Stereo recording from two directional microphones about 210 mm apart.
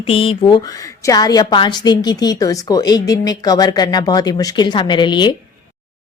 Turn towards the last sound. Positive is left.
turn(degrees=20)  # may be behind; listen again after turning